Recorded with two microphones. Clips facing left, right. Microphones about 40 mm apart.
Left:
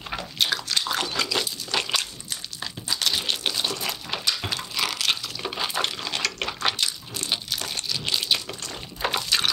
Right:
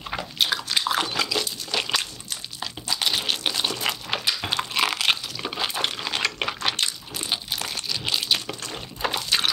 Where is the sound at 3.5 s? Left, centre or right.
Centre.